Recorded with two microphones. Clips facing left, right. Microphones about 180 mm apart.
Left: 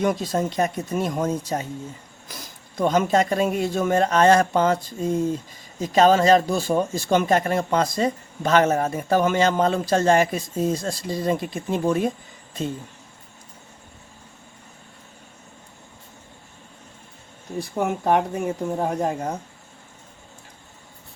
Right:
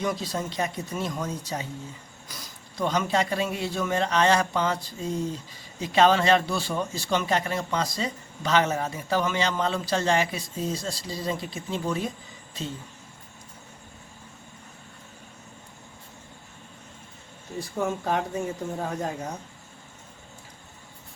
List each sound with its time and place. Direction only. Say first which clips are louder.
0.0 s a man's voice: left 6 dB; 50° left (ahead or behind)
17.7 s speech: left 6 dB; 65° left (ahead or behind)